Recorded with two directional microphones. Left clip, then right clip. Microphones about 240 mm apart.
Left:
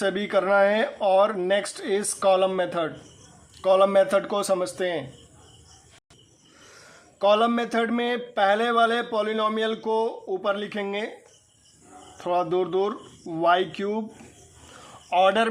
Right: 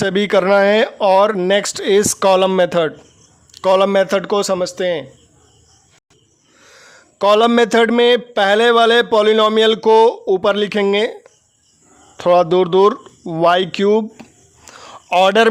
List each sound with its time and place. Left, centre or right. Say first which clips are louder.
0.0 s a man's voice: right 9 dB; right
7.2 s a man's voice: right 9 dB; right
12.1 s a man's voice: right 12 dB; right
14.7 s a sound: right 9 dB; right